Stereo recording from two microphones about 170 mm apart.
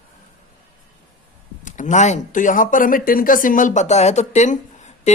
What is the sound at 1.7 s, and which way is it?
Speech, 45° left (ahead or behind).